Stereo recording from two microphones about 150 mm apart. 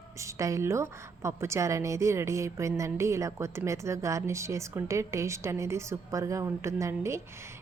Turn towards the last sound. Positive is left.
turn(degrees=-20)  # may be behind; listen again after turning